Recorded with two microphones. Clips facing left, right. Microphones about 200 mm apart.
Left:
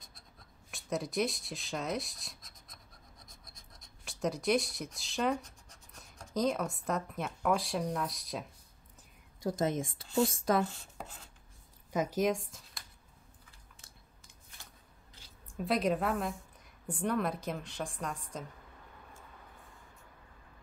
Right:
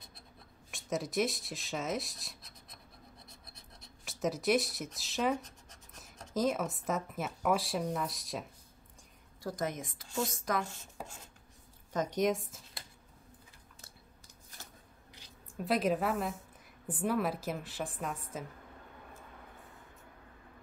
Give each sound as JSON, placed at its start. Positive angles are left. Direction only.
{"t": 0.7, "sound": "a woman's voice", "side_deg": 0}
{"t": 3.3, "sound": "scratch", "side_deg": -65}
{"t": 4.0, "sound": "a woman's voice", "side_deg": 0}
{"t": 9.4, "sound": "a woman's voice", "side_deg": 25}
{"t": 11.9, "sound": "a woman's voice", "side_deg": 5}
{"t": 13.7, "sound": "chewing", "side_deg": -40}
{"t": 15.5, "sound": "a woman's voice", "side_deg": 0}